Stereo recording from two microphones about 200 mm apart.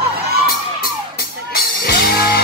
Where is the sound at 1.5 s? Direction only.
50° left (ahead or behind).